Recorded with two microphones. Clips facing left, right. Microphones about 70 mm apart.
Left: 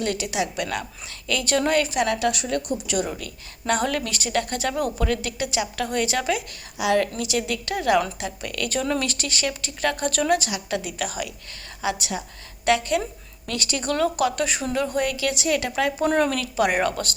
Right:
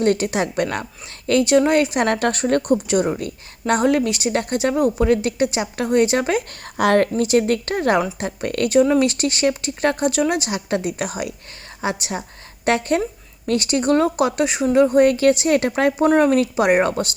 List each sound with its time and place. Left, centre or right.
0.0 s a woman's voice: right
2.0 s a woman's voice: right
6.7 s a woman's voice: right
7.2 s speech: right
8.7 s a woman's voice: centre
10.4 s a woman's voice: right
16.0 s speech: centre
16.3 s a woman's voice: right